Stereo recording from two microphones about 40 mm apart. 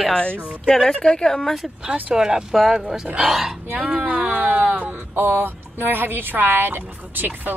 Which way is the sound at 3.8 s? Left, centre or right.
Right.